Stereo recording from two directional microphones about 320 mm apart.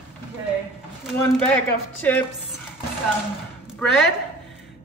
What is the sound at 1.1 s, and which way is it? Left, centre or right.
Speech, centre.